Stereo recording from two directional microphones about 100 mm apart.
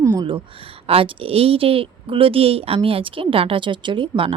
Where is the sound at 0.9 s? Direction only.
75° right (ahead or behind).